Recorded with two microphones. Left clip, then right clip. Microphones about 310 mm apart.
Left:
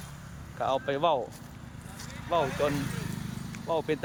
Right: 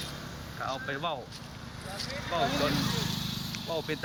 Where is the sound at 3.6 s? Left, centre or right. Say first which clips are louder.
Left 5 dB; centre.